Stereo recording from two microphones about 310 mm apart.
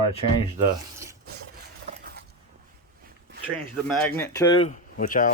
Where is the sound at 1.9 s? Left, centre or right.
Right.